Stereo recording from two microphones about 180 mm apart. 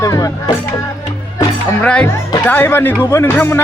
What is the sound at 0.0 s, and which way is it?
Speech, 20° left (ahead or behind).